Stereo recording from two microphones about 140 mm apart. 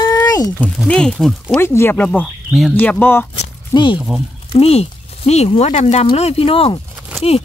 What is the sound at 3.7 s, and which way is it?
Speech, 35° left (ahead or behind).